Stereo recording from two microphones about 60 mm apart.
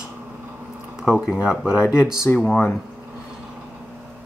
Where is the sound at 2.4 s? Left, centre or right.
Left.